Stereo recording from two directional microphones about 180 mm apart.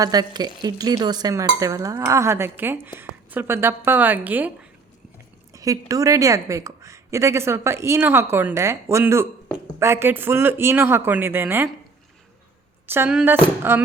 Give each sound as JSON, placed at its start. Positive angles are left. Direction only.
{"t": 0.0, "sound": "a woman's voice", "side_deg": -20}
{"t": 5.5, "sound": "a woman's voice", "side_deg": -20}
{"t": 12.9, "sound": "a woman's voice", "side_deg": -10}